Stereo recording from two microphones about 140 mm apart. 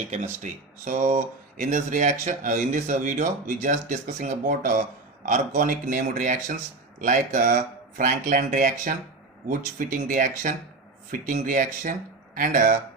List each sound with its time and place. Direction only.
0.4 s speech: 60° right (ahead or behind)